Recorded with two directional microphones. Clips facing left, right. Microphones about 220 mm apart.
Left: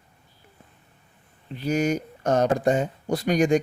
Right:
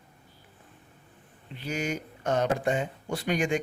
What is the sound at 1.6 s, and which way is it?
Speech, 40° left (ahead or behind).